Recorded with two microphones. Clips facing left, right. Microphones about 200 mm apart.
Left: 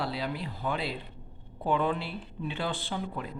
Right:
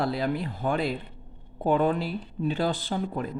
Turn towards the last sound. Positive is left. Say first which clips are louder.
# right 5 dB
turn(degrees=-45)  # may be behind; listen again after turning